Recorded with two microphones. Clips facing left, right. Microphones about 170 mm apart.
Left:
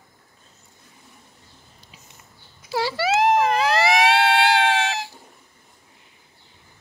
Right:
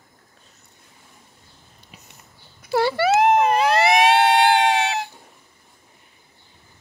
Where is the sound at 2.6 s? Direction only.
55° right (ahead or behind).